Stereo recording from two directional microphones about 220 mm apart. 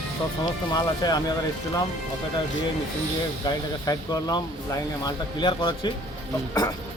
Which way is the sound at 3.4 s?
20° left (ahead or behind).